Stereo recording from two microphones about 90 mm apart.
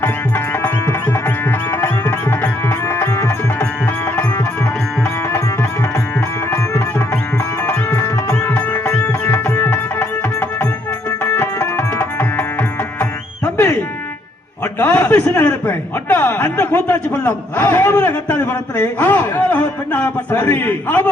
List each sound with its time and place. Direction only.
0.0 s music: 20° left (ahead or behind)
2.9 s music: 30° left (ahead or behind)
7.9 s music: 35° left (ahead or behind)
8.5 s music: 20° left (ahead or behind)
9.6 s tabla: 25° left (ahead or behind)
11.2 s tabla: 30° left (ahead or behind)
14.8 s a sound: 20° left (ahead or behind)